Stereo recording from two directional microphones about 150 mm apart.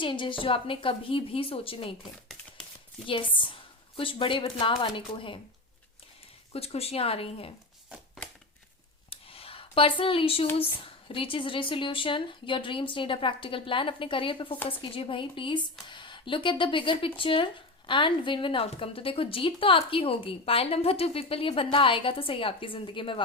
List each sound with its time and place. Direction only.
0.0 s speech: 35° left (ahead or behind)
3.1 s speech: 35° left (ahead or behind)
6.5 s speech: 40° left (ahead or behind)
9.0 s a sound: 40° left (ahead or behind)
10.6 s speech: 35° left (ahead or behind)